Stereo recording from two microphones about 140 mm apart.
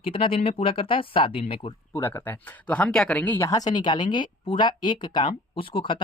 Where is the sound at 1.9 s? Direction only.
15° left (ahead or behind).